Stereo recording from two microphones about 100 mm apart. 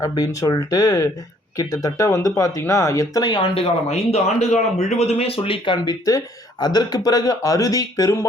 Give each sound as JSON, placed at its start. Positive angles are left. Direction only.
{"t": 0.0, "sound": "speech", "side_deg": 35}
{"t": 3.3, "sound": "speech", "side_deg": 65}